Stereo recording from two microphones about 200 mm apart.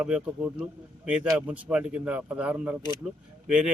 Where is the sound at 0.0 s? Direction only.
5° right (ahead or behind).